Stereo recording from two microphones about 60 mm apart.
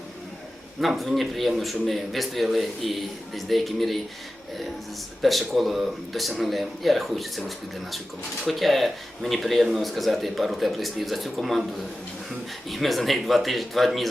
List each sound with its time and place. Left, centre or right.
0.8 s a man's voice: centre
5.2 s a man's voice: centre
12.6 s a man's voice: centre